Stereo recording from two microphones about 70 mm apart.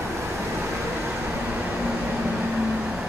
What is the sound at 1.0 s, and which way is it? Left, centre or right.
Vehicle, centre.